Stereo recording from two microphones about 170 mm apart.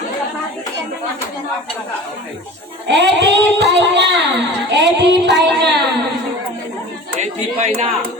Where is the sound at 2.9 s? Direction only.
85° right.